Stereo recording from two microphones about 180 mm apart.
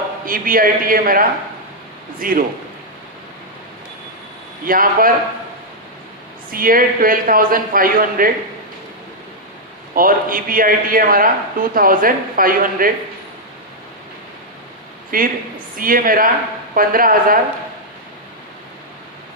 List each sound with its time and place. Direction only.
0.3 s a man's voice: 50° right (ahead or behind)
4.6 s a man's voice: 50° right (ahead or behind)
6.5 s a man's voice: 50° right (ahead or behind)
9.9 s a man's voice: 50° right (ahead or behind)
15.1 s a man's voice: 50° right (ahead or behind)